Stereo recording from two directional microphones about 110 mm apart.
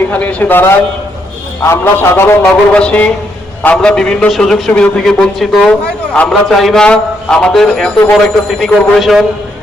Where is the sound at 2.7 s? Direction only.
10° left (ahead or behind).